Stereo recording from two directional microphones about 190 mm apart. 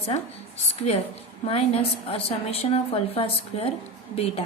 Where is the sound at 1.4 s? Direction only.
30° left (ahead or behind).